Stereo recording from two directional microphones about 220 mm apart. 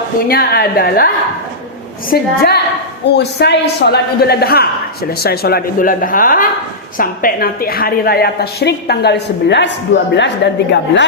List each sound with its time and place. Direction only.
0.3 s a woman's voice: 45° left (ahead or behind)